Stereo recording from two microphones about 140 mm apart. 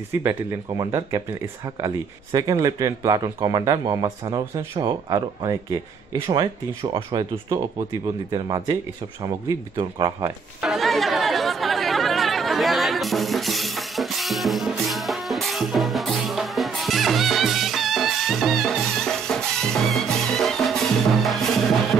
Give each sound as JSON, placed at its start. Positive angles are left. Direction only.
{"t": 0.1, "sound": "speech", "side_deg": -15}
{"t": 9.8, "sound": "speech", "side_deg": -30}
{"t": 10.6, "sound": "chatter", "side_deg": 0}